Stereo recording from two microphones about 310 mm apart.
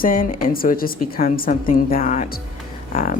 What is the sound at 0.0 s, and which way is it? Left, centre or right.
Speech, left.